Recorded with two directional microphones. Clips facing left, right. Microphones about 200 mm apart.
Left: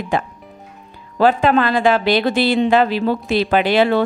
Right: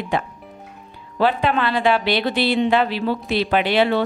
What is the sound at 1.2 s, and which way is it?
A woman's voice, 45° left (ahead or behind).